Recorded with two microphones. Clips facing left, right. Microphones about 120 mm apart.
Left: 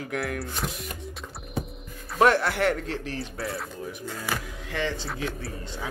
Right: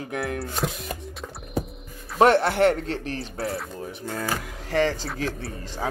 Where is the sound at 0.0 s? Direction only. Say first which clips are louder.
Right 1 dB; 25° right (ahead or behind).